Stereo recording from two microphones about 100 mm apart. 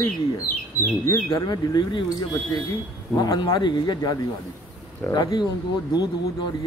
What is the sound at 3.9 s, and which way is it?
Speech, 40° left (ahead or behind).